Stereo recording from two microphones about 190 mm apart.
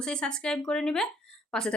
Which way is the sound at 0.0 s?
5° left (ahead or behind).